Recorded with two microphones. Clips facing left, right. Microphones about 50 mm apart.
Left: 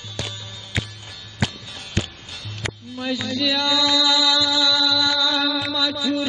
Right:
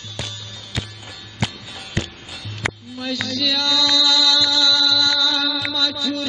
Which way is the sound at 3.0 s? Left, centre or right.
Centre.